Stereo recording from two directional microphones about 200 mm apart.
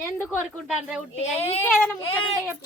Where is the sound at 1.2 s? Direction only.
30° left (ahead or behind).